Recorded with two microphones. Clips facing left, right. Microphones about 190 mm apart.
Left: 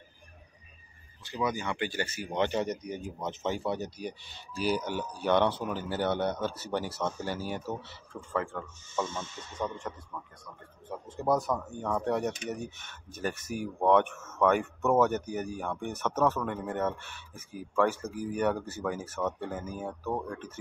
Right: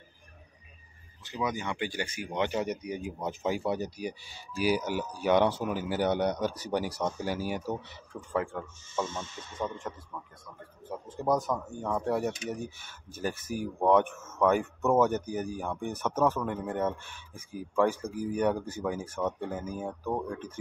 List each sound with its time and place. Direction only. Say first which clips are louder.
1.2 s speech: left 1 dB; 20° right (ahead or behind)
15.0 s speech: right 1 dB; 5° left (ahead or behind)
15.5 s speech: right 1 dB; 10° right (ahead or behind)